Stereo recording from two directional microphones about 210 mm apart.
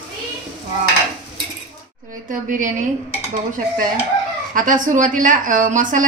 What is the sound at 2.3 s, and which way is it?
Speech, 40° right (ahead or behind).